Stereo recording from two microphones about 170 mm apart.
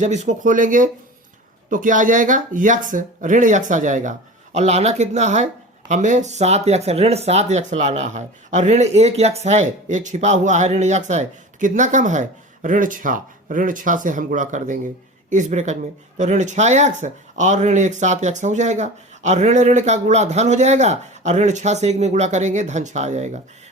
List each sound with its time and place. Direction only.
0.0 s speech: 45° right (ahead or behind)